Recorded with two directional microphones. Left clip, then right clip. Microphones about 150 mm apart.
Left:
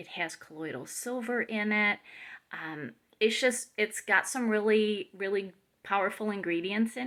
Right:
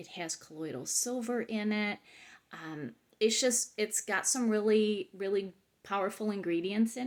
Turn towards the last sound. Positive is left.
turn(degrees=-40)  # may be behind; listen again after turning